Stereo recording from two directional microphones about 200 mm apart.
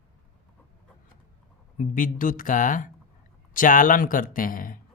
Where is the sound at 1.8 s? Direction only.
40° left (ahead or behind).